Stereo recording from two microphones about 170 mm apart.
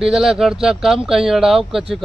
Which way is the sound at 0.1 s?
Centre (ahead or behind).